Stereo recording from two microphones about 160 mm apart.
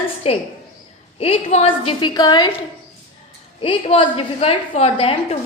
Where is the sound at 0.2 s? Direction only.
40° left (ahead or behind).